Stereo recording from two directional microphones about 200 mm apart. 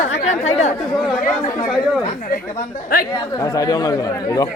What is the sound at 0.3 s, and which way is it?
Speech, 35° left (ahead or behind).